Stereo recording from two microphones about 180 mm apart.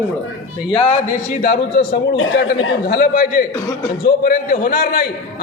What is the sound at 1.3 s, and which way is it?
Speech, 50° left (ahead or behind).